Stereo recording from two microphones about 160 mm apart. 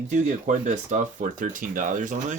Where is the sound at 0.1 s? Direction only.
50° right (ahead or behind).